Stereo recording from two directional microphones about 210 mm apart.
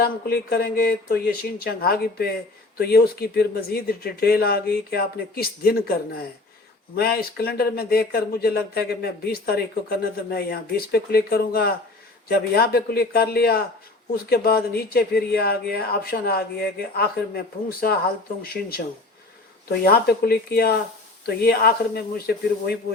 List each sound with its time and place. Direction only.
0.0 s speech: 45° left (ahead or behind)